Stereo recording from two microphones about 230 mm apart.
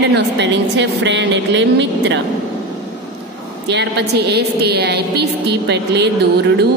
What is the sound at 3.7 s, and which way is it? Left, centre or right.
A woman's voice, right.